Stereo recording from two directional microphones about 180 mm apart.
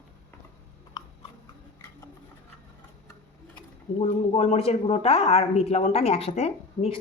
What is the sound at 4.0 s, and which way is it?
Speech, 35° left (ahead or behind).